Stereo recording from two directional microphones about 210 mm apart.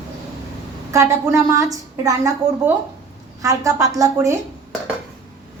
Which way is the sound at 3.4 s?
15° right (ahead or behind).